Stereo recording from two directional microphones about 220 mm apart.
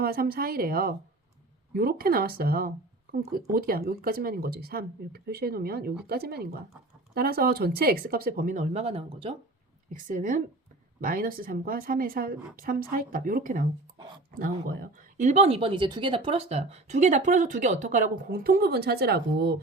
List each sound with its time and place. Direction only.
0.0 s speech: 45° right (ahead or behind); by 9.3 s 25° right (ahead or behind)
9.9 s speech: 35° right (ahead or behind)